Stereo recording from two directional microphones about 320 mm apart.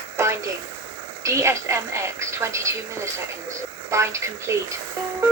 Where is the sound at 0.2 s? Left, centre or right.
Centre.